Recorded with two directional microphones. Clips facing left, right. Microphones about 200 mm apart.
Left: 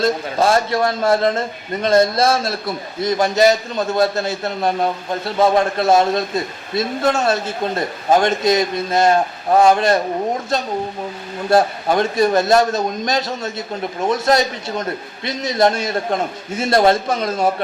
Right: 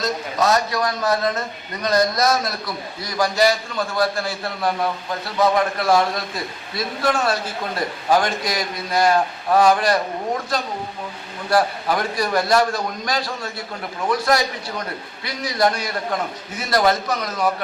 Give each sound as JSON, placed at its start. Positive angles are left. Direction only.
{"t": 0.0, "sound": "a man's voice", "side_deg": 30}